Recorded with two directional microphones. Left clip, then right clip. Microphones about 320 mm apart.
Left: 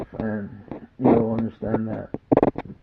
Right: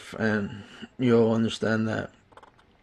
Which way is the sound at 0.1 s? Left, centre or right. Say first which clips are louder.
Right 3 dB; right.